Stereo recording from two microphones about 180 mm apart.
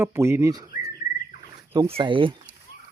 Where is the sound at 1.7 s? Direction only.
25° right (ahead or behind).